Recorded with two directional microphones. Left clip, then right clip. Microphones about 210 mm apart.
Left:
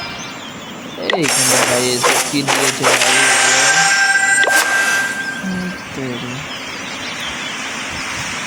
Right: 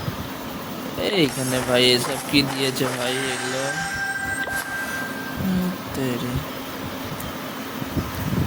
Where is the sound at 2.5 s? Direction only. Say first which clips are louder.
Left 10 dB; 40° left (ahead or behind).